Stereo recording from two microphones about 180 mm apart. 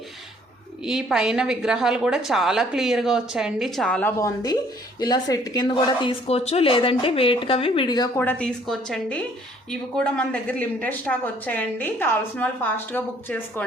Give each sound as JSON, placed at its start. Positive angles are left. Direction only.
{"t": 0.9, "sound": "a woman's voice", "side_deg": -5}
{"t": 4.9, "sound": "a woman's voice", "side_deg": 20}
{"t": 8.2, "sound": "a woman's voice", "side_deg": 5}